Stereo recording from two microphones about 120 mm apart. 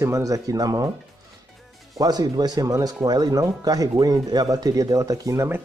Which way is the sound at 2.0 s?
35° right (ahead or behind).